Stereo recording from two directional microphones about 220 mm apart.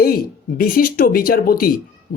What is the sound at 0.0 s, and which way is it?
Speech, 40° left (ahead or behind).